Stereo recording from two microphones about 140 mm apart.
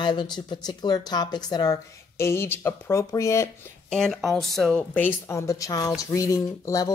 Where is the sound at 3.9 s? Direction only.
5° left (ahead or behind).